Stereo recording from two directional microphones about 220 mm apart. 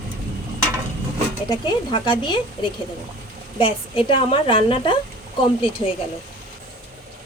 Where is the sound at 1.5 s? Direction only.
20° left (ahead or behind).